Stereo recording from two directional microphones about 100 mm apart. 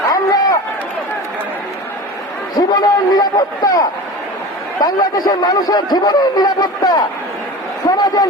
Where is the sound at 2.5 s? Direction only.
40° left (ahead or behind).